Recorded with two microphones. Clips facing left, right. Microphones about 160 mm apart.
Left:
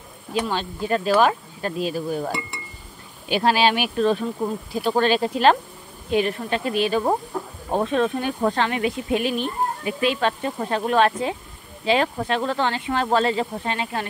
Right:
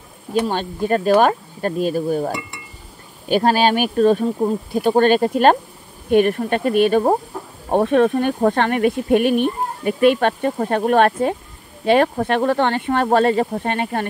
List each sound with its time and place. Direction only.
0.3 s speech: 50° right (ahead or behind)